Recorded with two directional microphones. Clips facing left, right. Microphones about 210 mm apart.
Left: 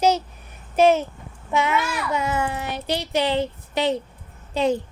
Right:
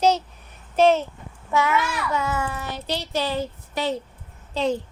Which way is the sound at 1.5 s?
20° left (ahead or behind).